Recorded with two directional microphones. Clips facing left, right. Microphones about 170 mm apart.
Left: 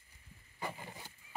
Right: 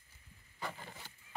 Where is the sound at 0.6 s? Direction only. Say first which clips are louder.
Left 2 dB; 15° left (ahead or behind).